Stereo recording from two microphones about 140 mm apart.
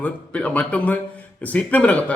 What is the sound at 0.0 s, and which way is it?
Speech, 10° left (ahead or behind).